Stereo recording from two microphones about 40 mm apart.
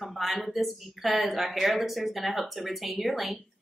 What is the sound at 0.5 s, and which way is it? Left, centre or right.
A woman's voice, centre.